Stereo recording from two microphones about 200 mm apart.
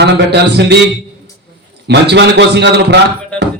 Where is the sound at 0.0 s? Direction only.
55° right (ahead or behind).